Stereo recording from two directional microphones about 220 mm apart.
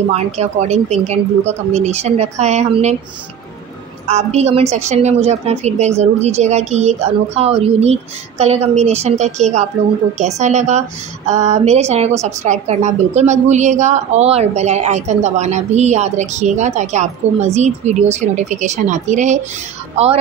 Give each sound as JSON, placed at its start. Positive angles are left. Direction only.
{"t": 0.1, "sound": "speech", "side_deg": -30}
{"t": 4.1, "sound": "a woman's voice", "side_deg": -30}